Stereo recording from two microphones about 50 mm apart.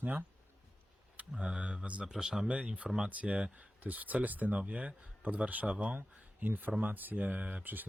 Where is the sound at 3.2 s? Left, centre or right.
Right.